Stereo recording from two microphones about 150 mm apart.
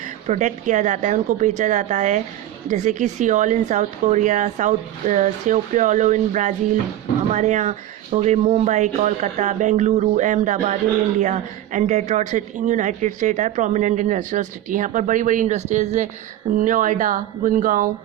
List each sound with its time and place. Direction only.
0.3 s speech: 55° right (ahead or behind)